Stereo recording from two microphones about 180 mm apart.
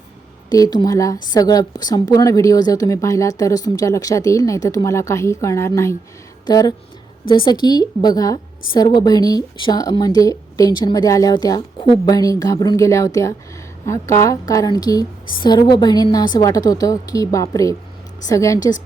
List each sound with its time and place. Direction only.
0.5 s a woman's voice: 20° left (ahead or behind)